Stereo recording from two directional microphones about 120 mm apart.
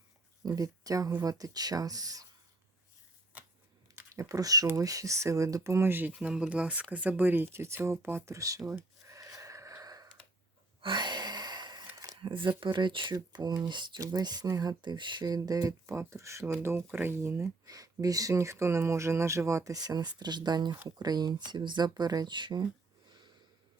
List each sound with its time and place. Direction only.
0.4 s speech: 30° right (ahead or behind)
3.9 s speech: 25° right (ahead or behind)
10.8 s a sound: 40° right (ahead or behind)
12.2 s speech: 45° right (ahead or behind)